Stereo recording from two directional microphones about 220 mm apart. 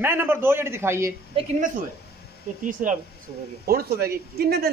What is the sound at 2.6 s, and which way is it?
Speech, 35° right (ahead or behind).